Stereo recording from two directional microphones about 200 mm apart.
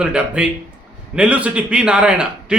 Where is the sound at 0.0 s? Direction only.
5° right (ahead or behind).